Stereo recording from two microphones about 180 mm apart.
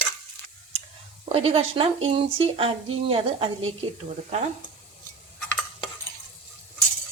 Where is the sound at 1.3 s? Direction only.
30° right (ahead or behind).